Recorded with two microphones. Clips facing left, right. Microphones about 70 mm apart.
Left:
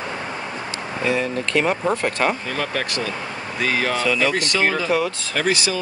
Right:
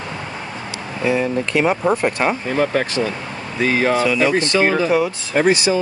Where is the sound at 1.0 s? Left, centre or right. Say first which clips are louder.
Right 4 dB; centre.